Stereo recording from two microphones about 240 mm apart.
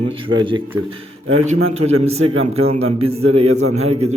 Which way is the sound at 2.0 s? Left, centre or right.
Right.